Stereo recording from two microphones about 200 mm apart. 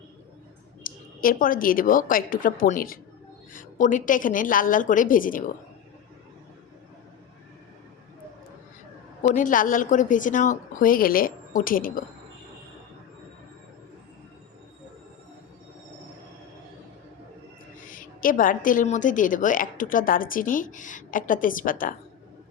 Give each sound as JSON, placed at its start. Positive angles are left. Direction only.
{"t": 0.9, "sound": "a woman's voice", "side_deg": 45}
{"t": 9.2, "sound": "a woman's voice", "side_deg": 40}
{"t": 17.7, "sound": "a woman's voice", "side_deg": 45}